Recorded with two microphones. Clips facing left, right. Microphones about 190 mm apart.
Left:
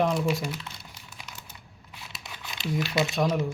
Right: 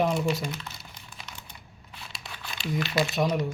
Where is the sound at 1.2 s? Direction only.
10° left (ahead or behind).